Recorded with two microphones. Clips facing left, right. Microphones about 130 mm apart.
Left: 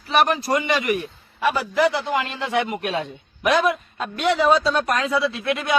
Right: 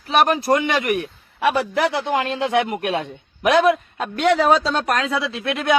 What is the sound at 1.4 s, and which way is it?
Speech, 70° right (ahead or behind).